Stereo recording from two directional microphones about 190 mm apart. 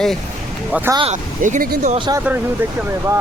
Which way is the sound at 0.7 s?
10° right (ahead or behind).